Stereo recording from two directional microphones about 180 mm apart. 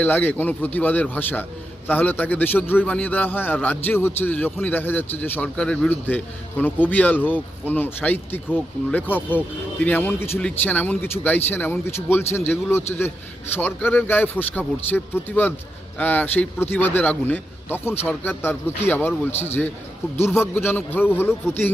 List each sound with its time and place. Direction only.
0.0 s a man's voice: 10° left (ahead or behind)
19.3 s speech: 35° left (ahead or behind)
20.1 s a man's voice: 15° left (ahead or behind)